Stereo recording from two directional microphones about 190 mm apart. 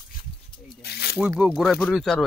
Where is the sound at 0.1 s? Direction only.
50° left (ahead or behind).